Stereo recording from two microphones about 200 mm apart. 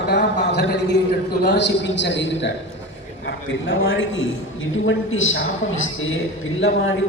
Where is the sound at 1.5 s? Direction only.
60° left (ahead or behind); by 5.4 s 80° left.